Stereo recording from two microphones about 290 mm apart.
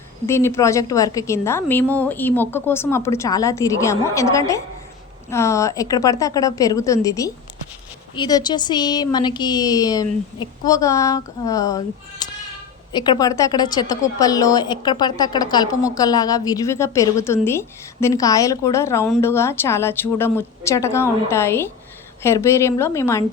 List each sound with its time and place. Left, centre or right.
0.3 s a woman's voice: centre
12.2 s a sound: centre
12.9 s a woman's voice: centre